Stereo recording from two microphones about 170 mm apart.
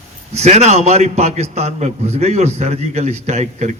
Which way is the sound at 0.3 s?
40° right (ahead or behind).